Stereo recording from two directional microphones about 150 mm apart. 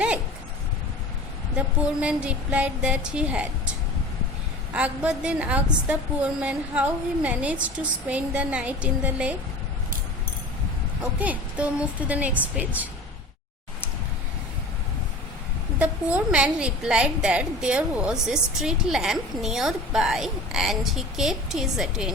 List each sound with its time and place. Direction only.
1.5 s a woman's voice: 5° right (ahead or behind)
4.7 s a woman's voice: 10° right (ahead or behind)
11.0 s a woman's voice: 10° right (ahead or behind)
15.8 s a woman's voice: 10° right (ahead or behind)